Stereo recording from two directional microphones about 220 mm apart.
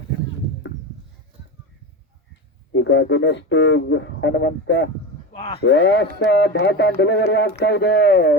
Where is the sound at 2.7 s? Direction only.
55° left (ahead or behind).